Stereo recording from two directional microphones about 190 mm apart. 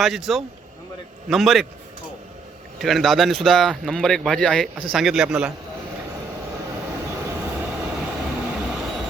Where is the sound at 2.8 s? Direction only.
Centre (ahead or behind).